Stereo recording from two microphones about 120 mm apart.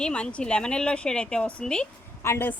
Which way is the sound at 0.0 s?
10° left (ahead or behind).